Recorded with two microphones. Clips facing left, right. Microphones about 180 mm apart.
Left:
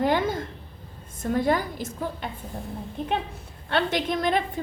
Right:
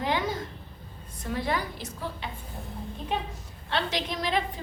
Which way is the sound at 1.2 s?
45° left (ahead or behind).